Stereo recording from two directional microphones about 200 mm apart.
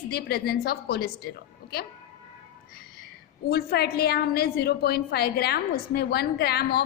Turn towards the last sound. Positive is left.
turn(degrees=50)  # may be behind; listen again after turning